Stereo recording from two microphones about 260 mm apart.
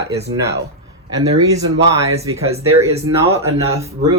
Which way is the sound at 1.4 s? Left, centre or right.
Centre.